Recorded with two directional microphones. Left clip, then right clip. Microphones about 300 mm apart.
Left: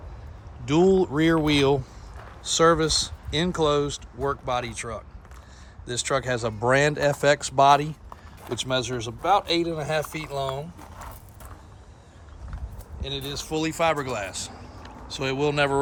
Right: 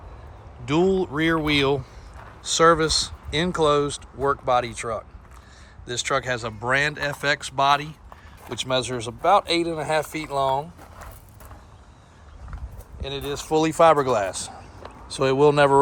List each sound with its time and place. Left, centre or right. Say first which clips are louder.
0.6 s speech: left 1 dB; centre
13.0 s speech: right 2 dB; centre